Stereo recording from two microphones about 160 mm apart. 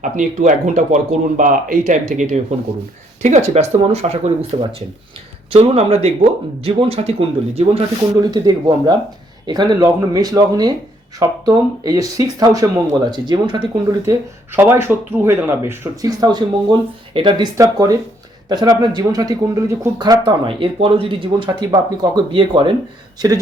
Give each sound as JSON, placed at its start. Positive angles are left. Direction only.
{"t": 0.0, "sound": "speech", "side_deg": -50}
{"t": 5.5, "sound": "speech", "side_deg": -40}
{"t": 8.1, "sound": "speech", "side_deg": -25}
{"t": 14.1, "sound": "speech", "side_deg": -15}